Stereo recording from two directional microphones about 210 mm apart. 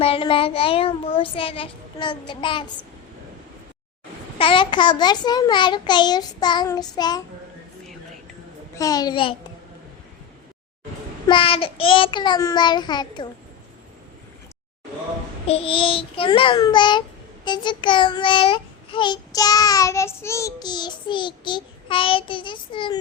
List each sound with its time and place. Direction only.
0.0 s a child's voice: 25° left (ahead or behind)
4.4 s a child's voice: 25° left (ahead or behind)
8.7 s a child's voice: 15° left (ahead or behind)
11.3 s a child's voice: 25° left (ahead or behind)
15.4 s a child's voice: 25° left (ahead or behind)